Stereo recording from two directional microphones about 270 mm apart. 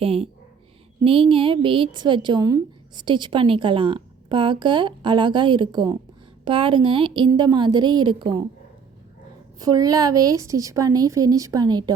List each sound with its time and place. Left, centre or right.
0.0 s a woman's voice: right
9.6 s a woman's voice: centre